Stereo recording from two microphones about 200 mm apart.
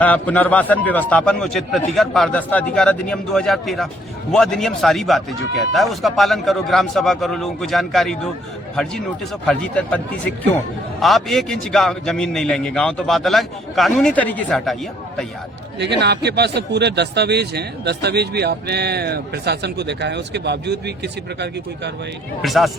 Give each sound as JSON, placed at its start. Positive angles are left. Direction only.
{"t": 0.0, "sound": "a man's voice", "side_deg": 10}
{"t": 9.5, "sound": "a man's voice", "side_deg": 5}
{"t": 11.0, "sound": "a man's voice", "side_deg": 0}
{"t": 15.8, "sound": "speech", "side_deg": -60}
{"t": 22.4, "sound": "a man's voice", "side_deg": 0}